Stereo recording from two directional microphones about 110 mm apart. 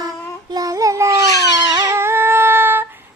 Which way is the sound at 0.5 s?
30° right (ahead or behind).